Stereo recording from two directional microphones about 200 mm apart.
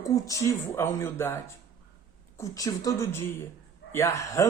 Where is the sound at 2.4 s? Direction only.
15° left (ahead or behind).